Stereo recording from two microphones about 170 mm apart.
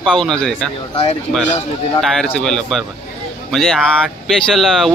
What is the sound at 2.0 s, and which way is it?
Speech, centre (ahead or behind).